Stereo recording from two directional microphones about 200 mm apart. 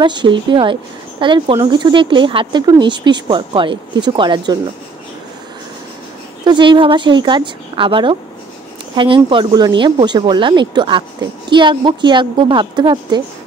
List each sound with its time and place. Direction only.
0.0 s speech: 20° right (ahead or behind)
6.4 s speech: 25° right (ahead or behind)